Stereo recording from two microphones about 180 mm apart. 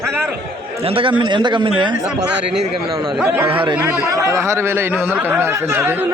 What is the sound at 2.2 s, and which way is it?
Speech, 70° right (ahead or behind).